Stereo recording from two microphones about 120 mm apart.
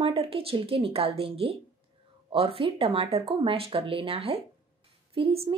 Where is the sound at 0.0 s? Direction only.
50° right (ahead or behind).